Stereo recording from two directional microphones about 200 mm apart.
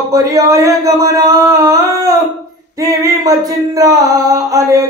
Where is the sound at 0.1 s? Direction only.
15° right (ahead or behind).